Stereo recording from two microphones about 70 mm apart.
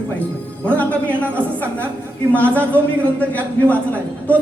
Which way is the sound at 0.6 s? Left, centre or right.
Left.